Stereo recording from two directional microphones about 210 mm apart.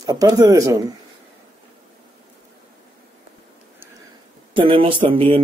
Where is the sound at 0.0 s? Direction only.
20° right (ahead or behind).